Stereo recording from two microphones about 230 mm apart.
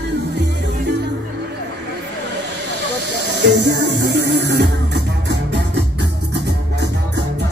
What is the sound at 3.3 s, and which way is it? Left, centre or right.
Music, right.